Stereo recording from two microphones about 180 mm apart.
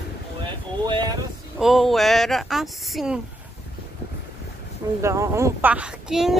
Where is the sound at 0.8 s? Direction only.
25° right (ahead or behind).